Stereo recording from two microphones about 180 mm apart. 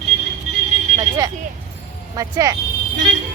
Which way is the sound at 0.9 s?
20° right (ahead or behind).